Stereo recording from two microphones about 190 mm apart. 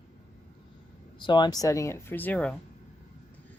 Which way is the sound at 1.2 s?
25° left (ahead or behind).